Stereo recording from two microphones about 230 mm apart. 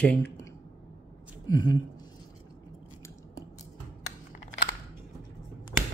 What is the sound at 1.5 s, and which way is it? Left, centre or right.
Speech, centre.